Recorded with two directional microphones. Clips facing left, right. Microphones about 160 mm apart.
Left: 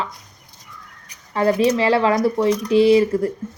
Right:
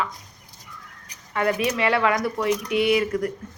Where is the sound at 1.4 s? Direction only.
30° left (ahead or behind).